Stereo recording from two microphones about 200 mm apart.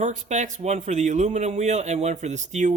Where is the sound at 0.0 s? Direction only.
35° right (ahead or behind).